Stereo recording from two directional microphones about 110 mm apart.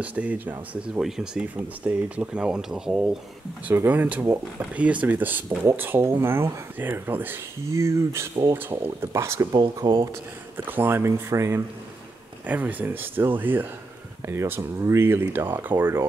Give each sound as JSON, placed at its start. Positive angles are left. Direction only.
{"t": 0.0, "sound": "speech", "side_deg": -15}
{"t": 3.6, "sound": "speech", "side_deg": -15}
{"t": 9.6, "sound": "speech", "side_deg": -40}
{"t": 10.6, "sound": "speech", "side_deg": -20}
{"t": 12.4, "sound": "speech", "side_deg": -15}